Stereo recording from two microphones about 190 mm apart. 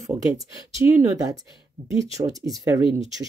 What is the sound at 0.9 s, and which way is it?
Speech, 15° right (ahead or behind).